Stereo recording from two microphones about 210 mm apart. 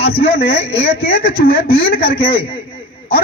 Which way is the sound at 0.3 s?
50° left (ahead or behind).